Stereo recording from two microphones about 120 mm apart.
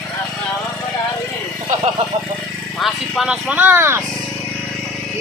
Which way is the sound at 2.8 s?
Centre (ahead or behind).